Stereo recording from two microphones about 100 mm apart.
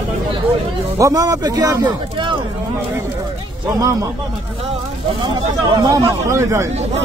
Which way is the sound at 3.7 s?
35° right (ahead or behind).